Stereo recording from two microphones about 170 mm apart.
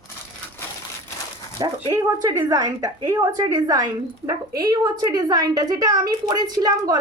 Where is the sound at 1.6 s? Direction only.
20° right (ahead or behind).